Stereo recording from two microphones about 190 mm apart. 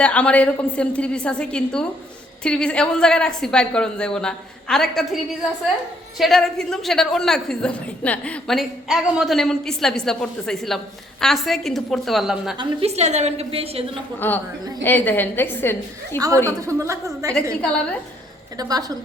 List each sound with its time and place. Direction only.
0.0 s a woman's voice: 5° left (ahead or behind)
6.1 s a woman's voice: centre (ahead or behind)
12.5 s a woman's voice: 35° right (ahead or behind)
14.2 s a woman's voice: 10° left (ahead or behind)
16.1 s a woman's voice: 20° right (ahead or behind)
18.5 s a woman's voice: 20° right (ahead or behind)